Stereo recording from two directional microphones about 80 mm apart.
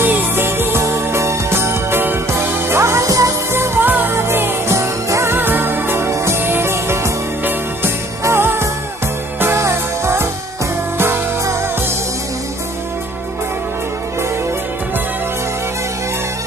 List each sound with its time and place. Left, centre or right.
0.0 s music: right
3.5 s music: right